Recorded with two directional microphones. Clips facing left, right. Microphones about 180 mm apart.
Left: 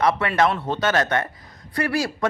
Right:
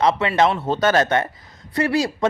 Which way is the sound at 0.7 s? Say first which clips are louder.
Right 4 dB; 35° right (ahead or behind).